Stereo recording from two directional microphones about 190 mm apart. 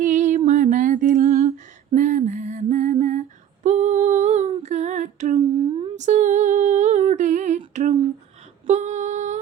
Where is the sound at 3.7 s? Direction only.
40° right (ahead or behind).